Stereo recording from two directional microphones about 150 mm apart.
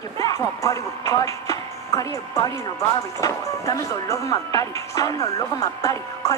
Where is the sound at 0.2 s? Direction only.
20° left (ahead or behind).